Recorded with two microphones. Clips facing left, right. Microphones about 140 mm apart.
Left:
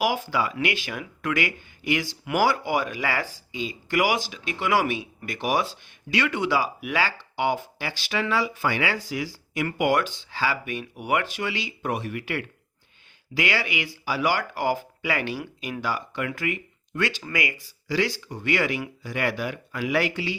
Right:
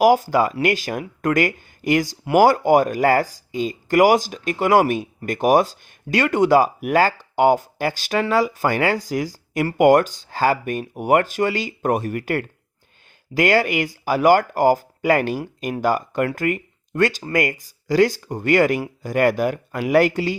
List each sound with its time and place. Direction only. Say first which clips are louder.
0.0 s speech: right 9 dB; 45° right (ahead or behind)